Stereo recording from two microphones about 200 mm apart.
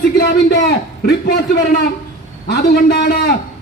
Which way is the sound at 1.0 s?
50° left (ahead or behind).